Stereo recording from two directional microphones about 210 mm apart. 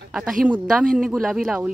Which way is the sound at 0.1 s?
Centre (ahead or behind).